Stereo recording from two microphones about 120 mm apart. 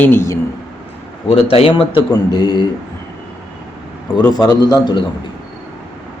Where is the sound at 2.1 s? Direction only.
35° left (ahead or behind).